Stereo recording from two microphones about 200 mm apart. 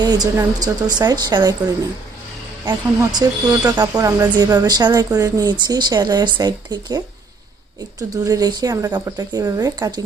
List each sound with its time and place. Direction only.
0.0 s a woman's voice: 20° right (ahead or behind)